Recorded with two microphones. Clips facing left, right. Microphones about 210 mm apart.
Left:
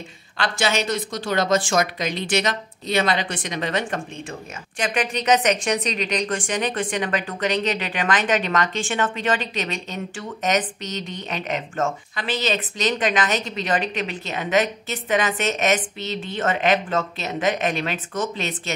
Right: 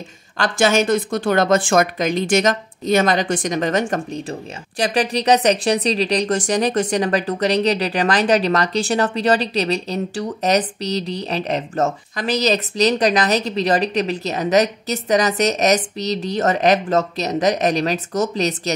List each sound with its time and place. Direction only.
0.4 s a woman's voice: 50° right (ahead or behind)